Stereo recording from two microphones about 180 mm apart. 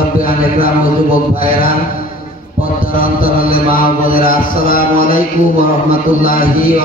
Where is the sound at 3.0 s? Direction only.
55° left (ahead or behind).